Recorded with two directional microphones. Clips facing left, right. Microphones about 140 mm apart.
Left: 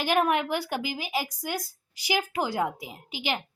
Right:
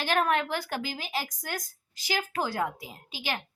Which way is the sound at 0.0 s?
15° left (ahead or behind).